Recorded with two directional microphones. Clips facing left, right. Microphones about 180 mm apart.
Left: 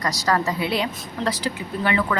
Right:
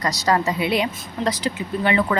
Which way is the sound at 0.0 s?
20° right (ahead or behind).